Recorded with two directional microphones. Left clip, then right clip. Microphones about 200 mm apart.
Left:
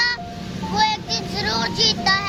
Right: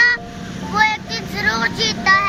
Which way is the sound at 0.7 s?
10° left (ahead or behind).